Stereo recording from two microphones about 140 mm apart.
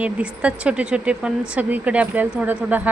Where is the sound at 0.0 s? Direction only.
10° right (ahead or behind).